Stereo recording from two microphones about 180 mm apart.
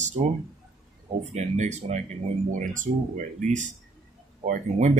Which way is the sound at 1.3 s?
40° right (ahead or behind).